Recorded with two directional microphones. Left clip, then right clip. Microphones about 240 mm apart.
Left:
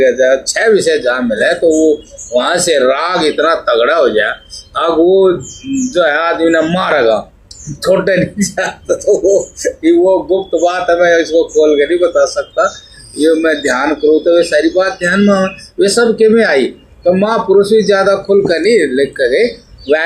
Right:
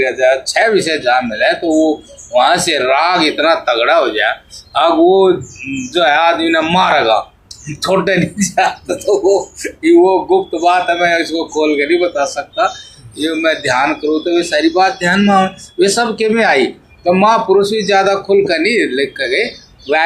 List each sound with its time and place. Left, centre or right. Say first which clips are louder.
0.0 s speech: left 3 dB; right
5.9 s speech: right 1 dB; right